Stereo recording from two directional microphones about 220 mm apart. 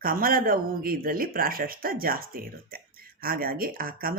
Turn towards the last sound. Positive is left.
turn(degrees=-40)  # may be behind; listen again after turning